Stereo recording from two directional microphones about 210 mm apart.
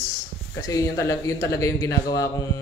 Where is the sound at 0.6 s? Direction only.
15° left (ahead or behind).